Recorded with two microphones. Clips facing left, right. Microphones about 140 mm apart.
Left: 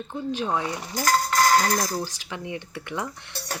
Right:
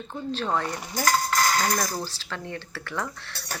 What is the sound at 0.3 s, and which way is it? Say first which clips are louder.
Speech: even; 10° left (ahead or behind).